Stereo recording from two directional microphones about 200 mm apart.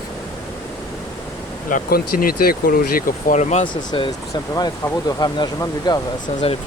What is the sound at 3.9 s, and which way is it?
Speech, 25° left (ahead or behind).